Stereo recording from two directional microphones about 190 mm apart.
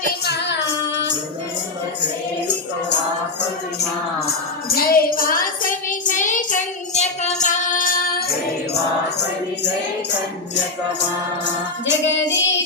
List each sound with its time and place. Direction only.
0.3 s music: 65° left (ahead or behind)
4.7 s child singing: 50° left (ahead or behind)
11.9 s music: 70° left (ahead or behind)